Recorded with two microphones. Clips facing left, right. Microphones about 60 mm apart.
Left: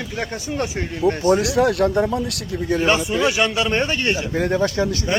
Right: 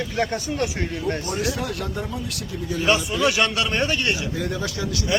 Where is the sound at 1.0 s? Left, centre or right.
Left.